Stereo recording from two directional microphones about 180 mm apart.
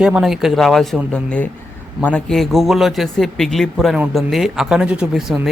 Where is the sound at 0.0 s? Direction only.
Centre (ahead or behind).